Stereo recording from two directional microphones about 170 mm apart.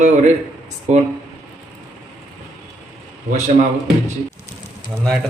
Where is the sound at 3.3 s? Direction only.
45° right (ahead or behind).